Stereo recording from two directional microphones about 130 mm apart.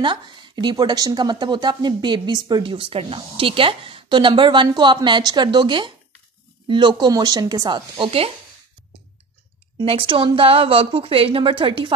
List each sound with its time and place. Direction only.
0.0 s speech: 35° right (ahead or behind)
9.8 s a woman's voice: 40° right (ahead or behind)